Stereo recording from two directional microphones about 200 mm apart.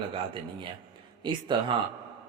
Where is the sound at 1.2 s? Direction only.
25° right (ahead or behind).